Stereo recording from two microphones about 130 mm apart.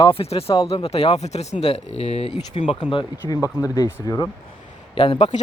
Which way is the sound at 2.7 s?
40° left (ahead or behind).